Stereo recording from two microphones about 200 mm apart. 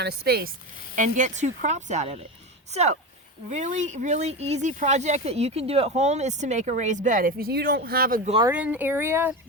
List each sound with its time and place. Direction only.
0.0 s speech: 50° right (ahead or behind)
0.9 s speech: 40° right (ahead or behind)
8.2 s speech: 30° right (ahead or behind)
8.4 s speech: 5° right (ahead or behind)